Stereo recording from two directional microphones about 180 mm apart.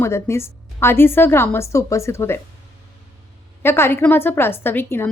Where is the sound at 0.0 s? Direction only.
15° left (ahead or behind).